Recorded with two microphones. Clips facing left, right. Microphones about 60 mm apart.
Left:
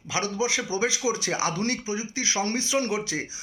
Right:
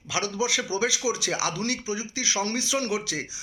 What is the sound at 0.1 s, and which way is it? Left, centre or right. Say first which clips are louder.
A man's voice: even; left.